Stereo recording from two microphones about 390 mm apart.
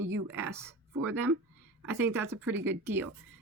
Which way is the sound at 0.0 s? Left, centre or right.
Right.